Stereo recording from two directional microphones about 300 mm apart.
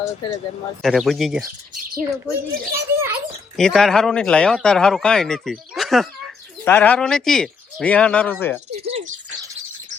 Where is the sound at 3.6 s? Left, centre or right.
Centre.